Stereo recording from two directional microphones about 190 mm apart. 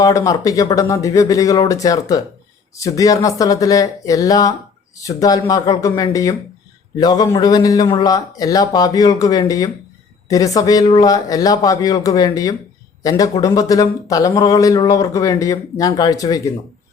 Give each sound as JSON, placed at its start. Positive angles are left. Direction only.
{"t": 0.0, "sound": "speech", "side_deg": 15}